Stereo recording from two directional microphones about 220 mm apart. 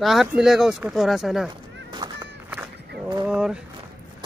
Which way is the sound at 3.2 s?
5° right (ahead or behind).